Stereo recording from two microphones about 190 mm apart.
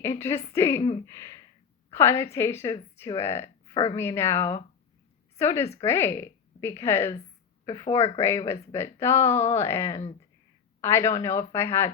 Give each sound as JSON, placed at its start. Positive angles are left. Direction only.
{"t": 0.0, "sound": "a woman's voice", "side_deg": 15}
{"t": 0.8, "sound": "speech", "side_deg": 30}
{"t": 1.0, "sound": "a sound", "side_deg": 15}
{"t": 1.9, "sound": "a woman's voice", "side_deg": 15}